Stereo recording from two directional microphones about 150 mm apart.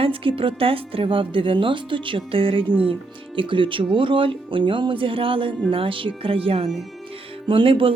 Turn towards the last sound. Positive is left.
turn(degrees=-35)  # may be behind; listen again after turning